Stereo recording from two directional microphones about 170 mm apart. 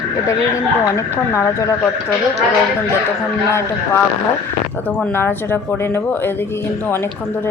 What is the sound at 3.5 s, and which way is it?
Speech, 15° left (ahead or behind).